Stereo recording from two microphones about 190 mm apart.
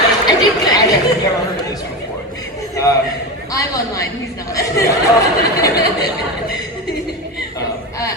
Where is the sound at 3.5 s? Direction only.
20° left (ahead or behind).